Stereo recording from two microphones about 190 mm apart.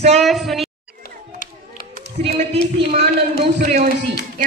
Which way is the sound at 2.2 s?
30° right (ahead or behind).